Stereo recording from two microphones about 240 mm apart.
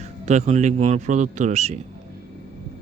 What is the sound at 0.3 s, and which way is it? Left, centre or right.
Speech, right.